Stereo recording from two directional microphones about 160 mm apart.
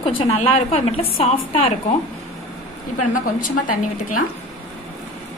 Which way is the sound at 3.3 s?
55° left (ahead or behind).